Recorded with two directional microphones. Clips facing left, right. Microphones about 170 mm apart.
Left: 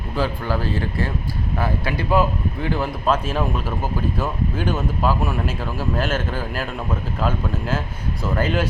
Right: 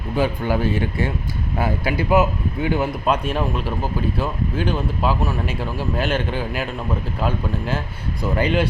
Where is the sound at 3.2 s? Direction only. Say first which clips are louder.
Right 1 dB; 5° left (ahead or behind).